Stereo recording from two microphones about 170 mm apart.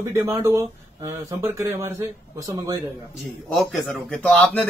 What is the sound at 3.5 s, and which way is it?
Speech, centre (ahead or behind).